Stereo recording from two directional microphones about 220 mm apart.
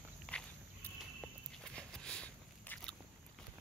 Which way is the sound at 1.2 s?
5° left (ahead or behind).